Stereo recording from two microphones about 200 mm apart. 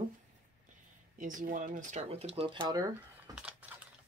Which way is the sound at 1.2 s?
40° right (ahead or behind).